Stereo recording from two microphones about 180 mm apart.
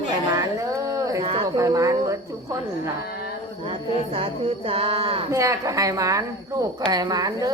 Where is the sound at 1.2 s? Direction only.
30° right (ahead or behind).